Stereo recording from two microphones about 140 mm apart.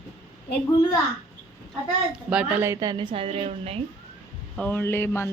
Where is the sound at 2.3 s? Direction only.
10° right (ahead or behind).